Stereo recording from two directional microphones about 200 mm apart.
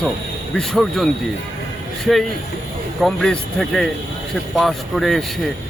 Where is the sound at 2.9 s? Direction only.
Centre (ahead or behind).